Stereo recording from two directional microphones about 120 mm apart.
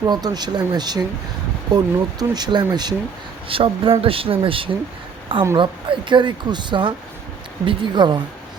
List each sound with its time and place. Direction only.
0.0 s speech: 35° right (ahead or behind)
3.5 s speech: 50° right (ahead or behind)